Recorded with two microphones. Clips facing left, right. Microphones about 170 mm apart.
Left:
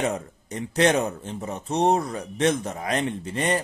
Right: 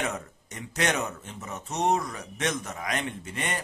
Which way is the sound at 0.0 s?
30° left (ahead or behind).